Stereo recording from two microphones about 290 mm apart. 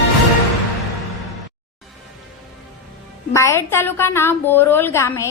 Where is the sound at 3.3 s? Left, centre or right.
Centre.